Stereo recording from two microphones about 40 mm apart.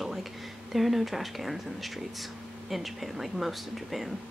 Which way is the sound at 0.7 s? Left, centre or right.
Centre.